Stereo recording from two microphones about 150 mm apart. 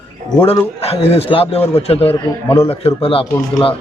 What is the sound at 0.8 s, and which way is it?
A man's voice, 40° left (ahead or behind).